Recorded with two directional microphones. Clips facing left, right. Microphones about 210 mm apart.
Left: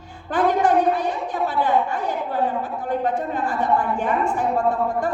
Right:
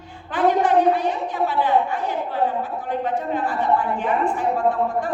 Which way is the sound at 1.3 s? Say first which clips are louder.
Even; 40° left (ahead or behind).